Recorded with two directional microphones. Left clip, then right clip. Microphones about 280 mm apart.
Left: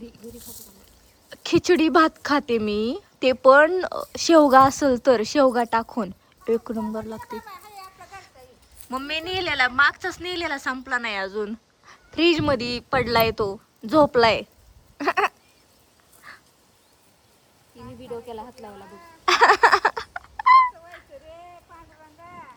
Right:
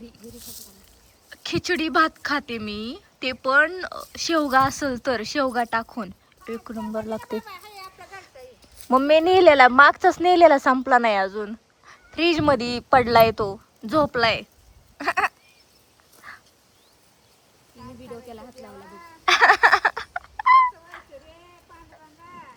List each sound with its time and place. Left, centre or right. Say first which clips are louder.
0.3 s speech: right 1 dB; centre
1.3 s speech: left 5 dB; centre
7.3 s children playing: right 4 dB; centre
8.0 s speech: right 2 dB; centre
14.9 s a sound: left 1 dB; centre
16.2 s dog: right 2 dB; centre
18.1 s a sound: left 6 dB; left
19.2 s cat: even; centre
20.9 s fowl: right 3 dB; centre
22.2 s boat: left 1 dB; centre